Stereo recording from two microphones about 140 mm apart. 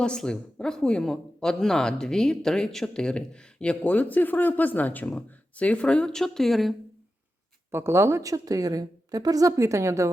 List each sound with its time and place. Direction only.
0.0 s speech: 5° left (ahead or behind)
7.7 s a woman's voice: 15° right (ahead or behind)